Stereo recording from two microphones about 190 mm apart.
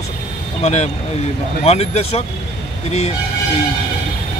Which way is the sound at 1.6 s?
35° left (ahead or behind).